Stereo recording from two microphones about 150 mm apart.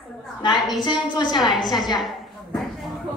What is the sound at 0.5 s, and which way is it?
Speech, centre (ahead or behind).